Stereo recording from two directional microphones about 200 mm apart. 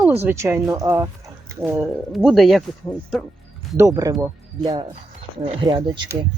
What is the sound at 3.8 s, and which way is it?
Speech, 15° right (ahead or behind).